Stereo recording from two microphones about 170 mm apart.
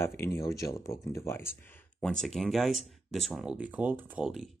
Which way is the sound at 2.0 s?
5° left (ahead or behind).